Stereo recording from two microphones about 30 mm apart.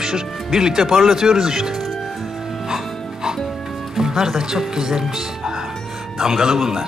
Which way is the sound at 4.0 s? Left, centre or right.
Centre.